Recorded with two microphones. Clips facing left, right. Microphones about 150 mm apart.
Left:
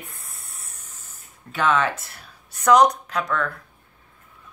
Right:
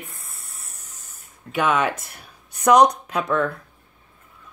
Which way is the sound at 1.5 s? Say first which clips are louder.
Right 1 dB; 15° right (ahead or behind).